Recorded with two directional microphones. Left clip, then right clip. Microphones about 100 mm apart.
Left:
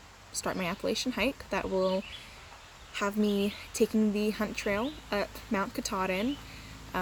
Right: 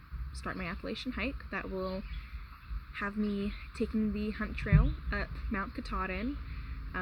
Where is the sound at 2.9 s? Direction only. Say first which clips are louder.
Left 6 dB; 40° left (ahead or behind).